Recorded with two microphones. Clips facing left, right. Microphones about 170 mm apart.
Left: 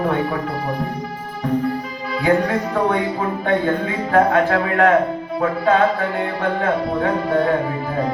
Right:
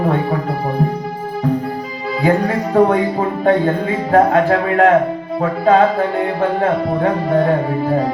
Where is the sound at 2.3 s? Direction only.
35° right (ahead or behind).